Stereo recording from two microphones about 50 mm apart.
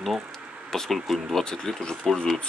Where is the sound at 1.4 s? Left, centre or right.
Centre.